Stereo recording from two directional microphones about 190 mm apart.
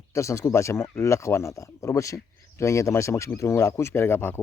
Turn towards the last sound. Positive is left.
turn(degrees=10)  # may be behind; listen again after turning